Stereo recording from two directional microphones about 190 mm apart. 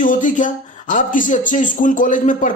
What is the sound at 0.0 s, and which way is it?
Speech, 45° left (ahead or behind).